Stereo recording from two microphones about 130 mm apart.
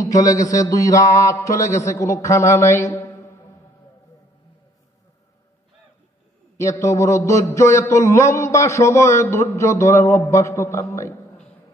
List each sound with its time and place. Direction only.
0.0 s a man's voice: 25° left (ahead or behind)
6.5 s a man's voice: 20° left (ahead or behind)